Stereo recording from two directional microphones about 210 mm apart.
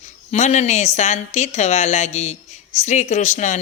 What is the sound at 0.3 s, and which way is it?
Speech, 35° left (ahead or behind).